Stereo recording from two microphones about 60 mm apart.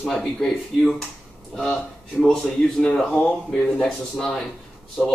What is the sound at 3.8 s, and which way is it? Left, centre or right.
Speech, centre.